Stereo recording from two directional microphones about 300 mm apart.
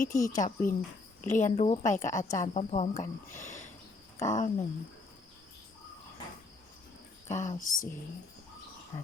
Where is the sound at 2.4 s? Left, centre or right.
Left.